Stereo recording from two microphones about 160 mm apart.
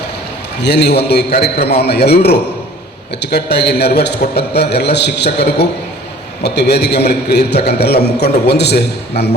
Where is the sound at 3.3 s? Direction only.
90° left.